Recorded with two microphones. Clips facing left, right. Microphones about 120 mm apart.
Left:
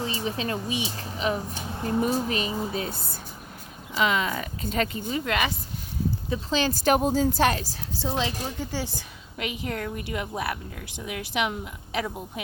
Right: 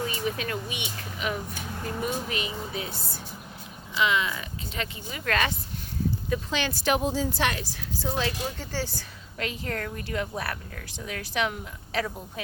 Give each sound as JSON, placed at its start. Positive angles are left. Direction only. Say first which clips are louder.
{"t": 0.0, "sound": "speech", "louder": "left 1 dB", "side_deg": 30}
{"t": 3.9, "sound": "speech", "louder": "left 1 dB", "side_deg": 40}
{"t": 5.1, "sound": "speech", "louder": "left 1 dB", "side_deg": 20}
{"t": 6.3, "sound": "speech", "louder": "left 5 dB", "side_deg": 35}
{"t": 8.5, "sound": "a woman's voice", "louder": "left 2 dB", "side_deg": 15}